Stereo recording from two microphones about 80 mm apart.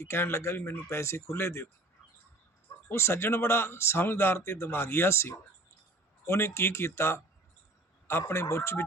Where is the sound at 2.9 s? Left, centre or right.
Left.